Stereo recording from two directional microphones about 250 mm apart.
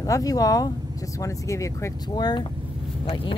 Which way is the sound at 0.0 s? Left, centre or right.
Centre.